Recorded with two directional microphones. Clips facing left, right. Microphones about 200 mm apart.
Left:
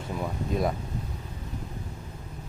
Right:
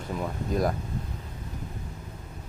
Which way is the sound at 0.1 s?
Centre (ahead or behind).